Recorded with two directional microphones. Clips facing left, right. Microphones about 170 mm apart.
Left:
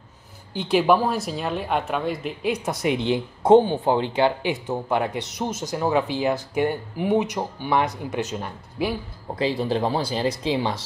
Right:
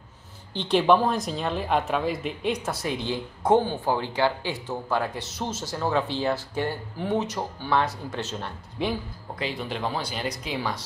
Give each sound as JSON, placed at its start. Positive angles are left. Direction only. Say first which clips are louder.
{"t": 0.5, "sound": "speech", "louder": "left 1 dB", "side_deg": 10}
{"t": 2.7, "sound": "speech", "louder": "left 6 dB", "side_deg": 20}
{"t": 9.3, "sound": "speech", "louder": "left 8 dB", "side_deg": 30}